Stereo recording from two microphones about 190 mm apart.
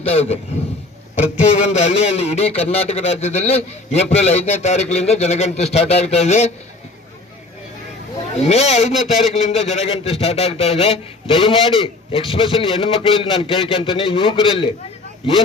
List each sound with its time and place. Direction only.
0.0 s a man's voice: 30° left (ahead or behind)
1.4 s a man's voice: 35° left (ahead or behind)
8.4 s a man's voice: 35° left (ahead or behind)
8.9 s speech: centre (ahead or behind)
9.6 s a man's voice: 35° left (ahead or behind)